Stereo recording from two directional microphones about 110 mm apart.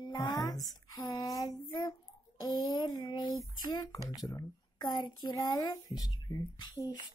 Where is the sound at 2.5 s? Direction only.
40° left (ahead or behind).